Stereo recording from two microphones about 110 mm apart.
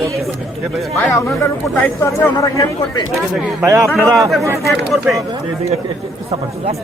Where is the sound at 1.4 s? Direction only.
25° left (ahead or behind).